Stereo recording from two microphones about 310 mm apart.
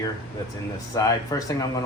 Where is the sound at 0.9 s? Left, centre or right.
Centre.